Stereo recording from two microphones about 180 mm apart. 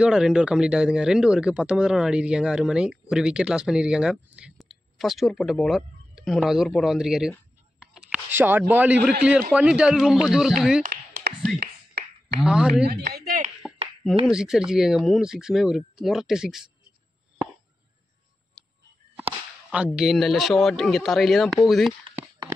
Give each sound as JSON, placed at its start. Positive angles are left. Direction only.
{"t": 0.0, "sound": "speech", "side_deg": -5}
{"t": 7.8, "sound": "a sound", "side_deg": -5}
{"t": 9.5, "sound": "speech", "side_deg": -5}
{"t": 10.8, "sound": "a sound", "side_deg": -55}
{"t": 12.4, "sound": "speech", "side_deg": -5}
{"t": 12.8, "sound": "speech", "side_deg": -60}
{"t": 14.2, "sound": "speech", "side_deg": -5}
{"t": 19.1, "sound": "whip", "side_deg": -10}
{"t": 20.0, "sound": "speech", "side_deg": 0}
{"t": 22.4, "sound": "a sound", "side_deg": -25}